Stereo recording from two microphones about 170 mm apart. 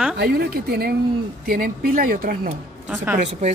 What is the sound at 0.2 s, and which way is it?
Speech, 70° right (ahead or behind).